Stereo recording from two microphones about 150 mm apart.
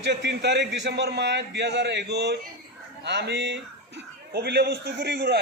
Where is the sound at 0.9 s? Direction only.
90° right.